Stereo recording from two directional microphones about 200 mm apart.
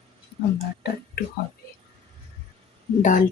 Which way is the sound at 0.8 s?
55° left (ahead or behind).